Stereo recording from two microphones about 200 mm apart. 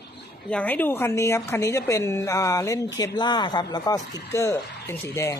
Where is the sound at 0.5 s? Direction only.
10° left (ahead or behind).